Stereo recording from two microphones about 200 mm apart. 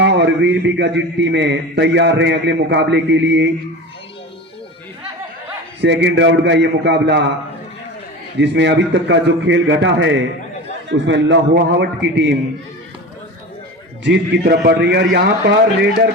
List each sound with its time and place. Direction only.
0.0 s a man's voice: 60° right (ahead or behind)
5.8 s a man's voice: 60° right (ahead or behind)
8.4 s a man's voice: 60° right (ahead or behind)
14.0 s a man's voice: 60° right (ahead or behind)